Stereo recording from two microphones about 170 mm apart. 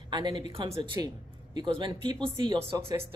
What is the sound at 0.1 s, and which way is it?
A woman's voice, 25° right (ahead or behind).